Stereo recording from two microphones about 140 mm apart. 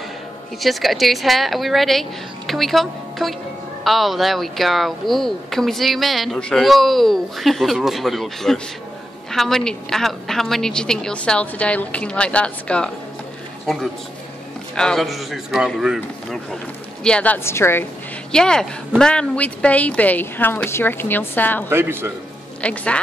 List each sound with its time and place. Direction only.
0.6 s a woman's voice: centre (ahead or behind); by 17.8 s 15° left (ahead or behind)
18.3 s a woman's voice: 5° left (ahead or behind)
21.6 s a man's voice: 15° right (ahead or behind)
22.6 s a woman's voice: 10° left (ahead or behind)